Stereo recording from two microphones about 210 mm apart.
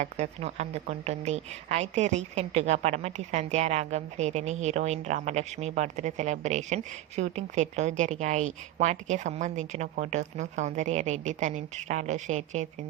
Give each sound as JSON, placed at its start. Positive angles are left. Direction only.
{"t": 0.0, "sound": "a woman's voice", "side_deg": -30}